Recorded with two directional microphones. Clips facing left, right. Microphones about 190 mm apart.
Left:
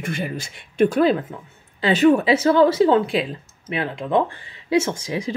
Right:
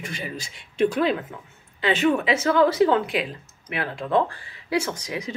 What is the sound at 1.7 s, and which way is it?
Speech, 35° left (ahead or behind).